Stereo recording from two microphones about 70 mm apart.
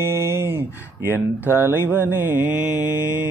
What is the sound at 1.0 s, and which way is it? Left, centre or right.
Mantra, right.